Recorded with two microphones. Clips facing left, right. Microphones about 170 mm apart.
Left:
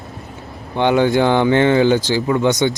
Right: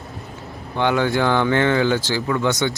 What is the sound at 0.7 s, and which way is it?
Speech, 20° left (ahead or behind).